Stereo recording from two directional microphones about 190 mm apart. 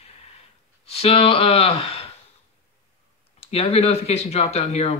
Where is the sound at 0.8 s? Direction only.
30° left (ahead or behind).